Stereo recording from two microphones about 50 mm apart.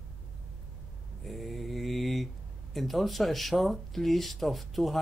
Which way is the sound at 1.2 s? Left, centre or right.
Centre.